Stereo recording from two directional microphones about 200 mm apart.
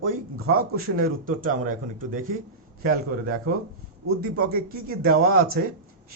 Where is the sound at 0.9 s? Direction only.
45° right (ahead or behind).